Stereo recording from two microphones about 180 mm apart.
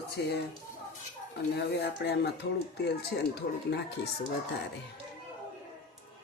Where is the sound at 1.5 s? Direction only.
70° left (ahead or behind).